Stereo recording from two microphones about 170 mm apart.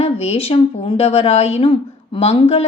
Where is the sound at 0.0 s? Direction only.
35° left (ahead or behind).